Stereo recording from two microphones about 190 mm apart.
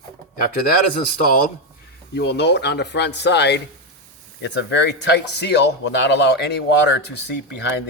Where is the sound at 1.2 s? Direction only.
45° left (ahead or behind).